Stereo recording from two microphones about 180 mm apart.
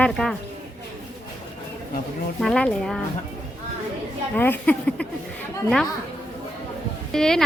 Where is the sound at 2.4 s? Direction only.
5° left (ahead or behind).